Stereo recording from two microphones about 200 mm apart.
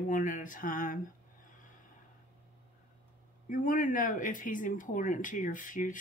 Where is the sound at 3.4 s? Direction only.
40° left (ahead or behind).